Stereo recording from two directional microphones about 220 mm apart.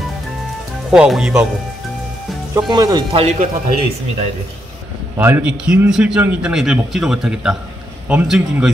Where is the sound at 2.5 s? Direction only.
15° right (ahead or behind).